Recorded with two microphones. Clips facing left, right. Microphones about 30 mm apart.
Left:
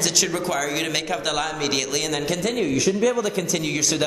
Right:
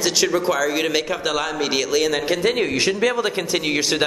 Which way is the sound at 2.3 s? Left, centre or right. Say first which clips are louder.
Right 4 dB; right.